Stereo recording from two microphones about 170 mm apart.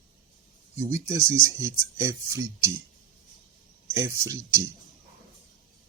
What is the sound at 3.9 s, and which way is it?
Speech, 15° right (ahead or behind).